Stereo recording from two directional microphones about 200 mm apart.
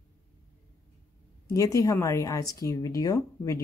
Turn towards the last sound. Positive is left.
turn(degrees=15)  # may be behind; listen again after turning